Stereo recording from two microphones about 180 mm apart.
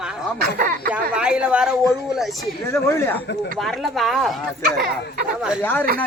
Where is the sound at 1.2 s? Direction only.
5° right (ahead or behind).